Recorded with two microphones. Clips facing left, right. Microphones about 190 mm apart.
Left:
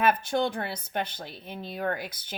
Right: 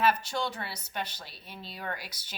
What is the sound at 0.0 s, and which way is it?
Speech, 55° left (ahead or behind).